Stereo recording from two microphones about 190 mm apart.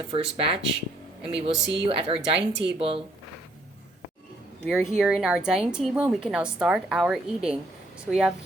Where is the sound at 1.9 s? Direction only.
30° right (ahead or behind).